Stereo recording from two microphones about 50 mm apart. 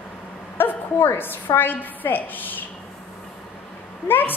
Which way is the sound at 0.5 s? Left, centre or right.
Left.